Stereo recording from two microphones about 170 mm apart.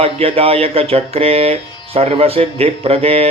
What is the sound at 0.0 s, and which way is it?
Mantra, 35° right (ahead or behind).